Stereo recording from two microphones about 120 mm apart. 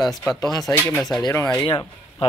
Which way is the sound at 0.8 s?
15° left (ahead or behind).